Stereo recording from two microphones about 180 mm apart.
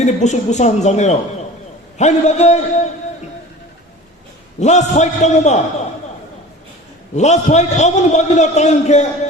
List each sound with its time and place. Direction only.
0.0 s a man's voice: 40° left (ahead or behind)
4.6 s a man's voice: 40° left (ahead or behind)
7.2 s a man's voice: 40° left (ahead or behind)